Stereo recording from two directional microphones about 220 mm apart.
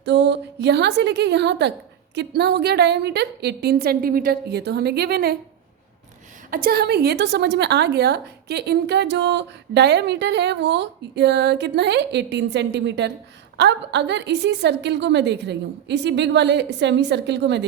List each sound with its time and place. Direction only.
0.0 s a woman's voice: 50° right (ahead or behind)
6.5 s a woman's voice: 45° right (ahead or behind)